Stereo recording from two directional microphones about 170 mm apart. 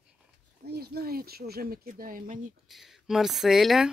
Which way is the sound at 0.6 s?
70° right (ahead or behind).